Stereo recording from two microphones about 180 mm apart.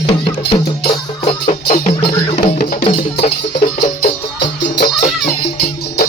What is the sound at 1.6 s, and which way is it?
Music, 50° left (ahead or behind).